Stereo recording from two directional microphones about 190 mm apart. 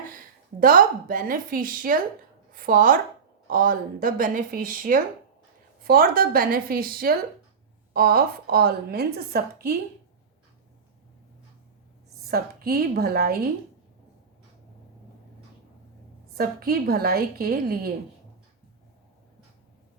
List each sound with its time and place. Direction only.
0.6 s a woman's voice: 50° right (ahead or behind)
12.3 s a woman's voice: 50° right (ahead or behind)
16.4 s a woman's voice: 50° right (ahead or behind)